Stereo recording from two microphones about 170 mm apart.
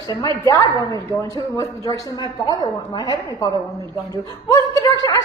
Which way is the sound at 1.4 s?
25° left (ahead or behind).